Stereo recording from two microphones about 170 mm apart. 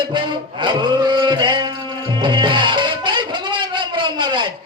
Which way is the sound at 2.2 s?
25° right (ahead or behind).